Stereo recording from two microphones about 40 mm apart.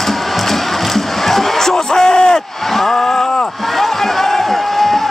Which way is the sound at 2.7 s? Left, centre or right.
Centre.